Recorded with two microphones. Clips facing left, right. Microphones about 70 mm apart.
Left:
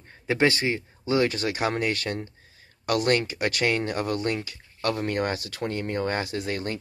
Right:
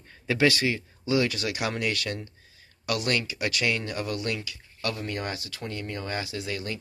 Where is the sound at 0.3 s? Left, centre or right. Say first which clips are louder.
Left 1 dB; left.